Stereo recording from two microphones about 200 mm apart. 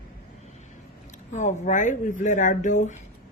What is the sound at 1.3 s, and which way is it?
Speech, 35° left (ahead or behind).